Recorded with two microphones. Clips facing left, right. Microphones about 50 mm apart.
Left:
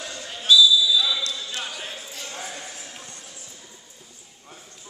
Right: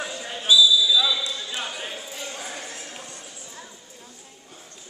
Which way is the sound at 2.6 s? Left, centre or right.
Centre.